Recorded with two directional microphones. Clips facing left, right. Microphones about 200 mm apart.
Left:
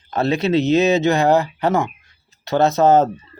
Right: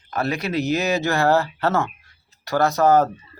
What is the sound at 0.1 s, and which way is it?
Speech, 25° left (ahead or behind).